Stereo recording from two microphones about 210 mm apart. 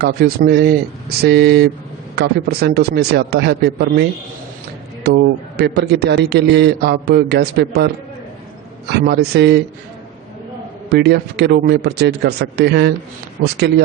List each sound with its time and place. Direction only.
0.0 s a man's voice: 45° right (ahead or behind)
5.0 s a man's voice: 50° right (ahead or behind)
8.9 s a man's voice: 50° right (ahead or behind)
10.8 s a man's voice: 50° right (ahead or behind)